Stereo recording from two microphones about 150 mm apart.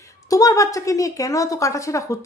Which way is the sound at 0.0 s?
25° left (ahead or behind).